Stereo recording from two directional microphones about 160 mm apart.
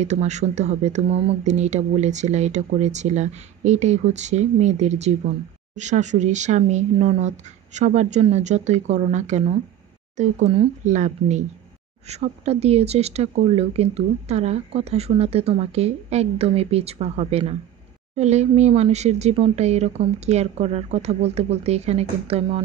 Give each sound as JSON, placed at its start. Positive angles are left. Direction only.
{"t": 0.0, "sound": "speech", "side_deg": -45}